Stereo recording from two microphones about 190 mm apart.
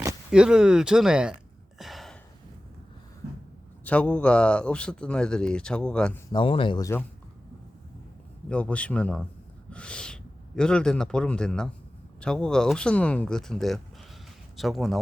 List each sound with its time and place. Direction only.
0.3 s speech: 5° right (ahead or behind)
1.8 s gasp: centre (ahead or behind)
3.8 s speech: 5° left (ahead or behind)
6.3 s speech: 25° left (ahead or behind)
8.4 s speech: 5° left (ahead or behind)